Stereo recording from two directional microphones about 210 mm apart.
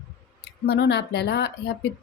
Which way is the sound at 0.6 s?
55° left (ahead or behind).